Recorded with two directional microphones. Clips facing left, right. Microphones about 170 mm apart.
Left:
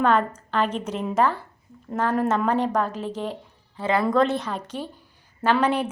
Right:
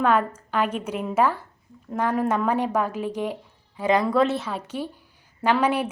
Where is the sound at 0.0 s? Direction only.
10° right (ahead or behind).